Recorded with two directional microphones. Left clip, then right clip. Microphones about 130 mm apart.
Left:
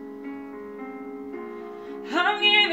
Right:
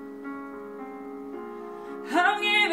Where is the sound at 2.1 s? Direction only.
30° right (ahead or behind).